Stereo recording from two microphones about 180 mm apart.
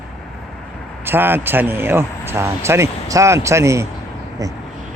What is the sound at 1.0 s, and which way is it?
A man's voice, 10° right (ahead or behind).